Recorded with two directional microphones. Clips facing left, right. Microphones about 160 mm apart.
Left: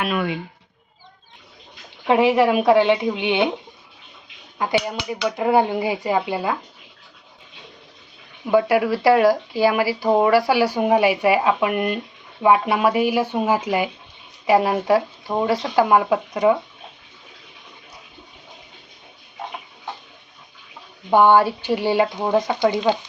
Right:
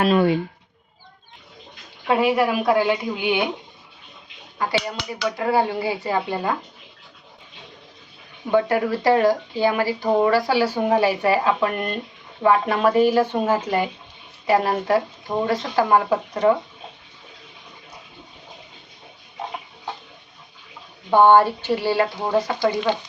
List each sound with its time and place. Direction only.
0.0 s speech: 35° right (ahead or behind)
2.0 s a woman's voice: 20° left (ahead or behind)
4.5 s speech: 15° left (ahead or behind)
8.4 s speech: 10° left (ahead or behind)
21.3 s a woman's voice: 10° left (ahead or behind)